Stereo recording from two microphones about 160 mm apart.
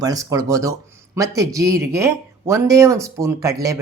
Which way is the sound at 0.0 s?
20° right (ahead or behind).